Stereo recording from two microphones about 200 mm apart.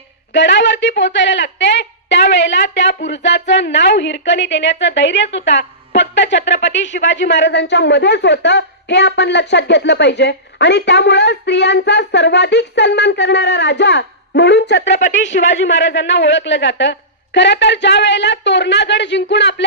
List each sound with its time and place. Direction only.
0.3 s a woman's voice: 65° left (ahead or behind)